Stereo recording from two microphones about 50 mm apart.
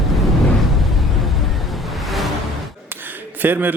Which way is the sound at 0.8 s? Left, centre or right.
Centre.